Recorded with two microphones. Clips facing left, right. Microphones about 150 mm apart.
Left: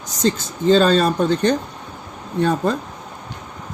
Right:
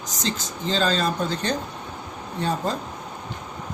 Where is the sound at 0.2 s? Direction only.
55° left (ahead or behind).